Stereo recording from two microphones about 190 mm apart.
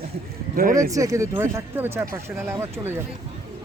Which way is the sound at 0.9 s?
15° right (ahead or behind).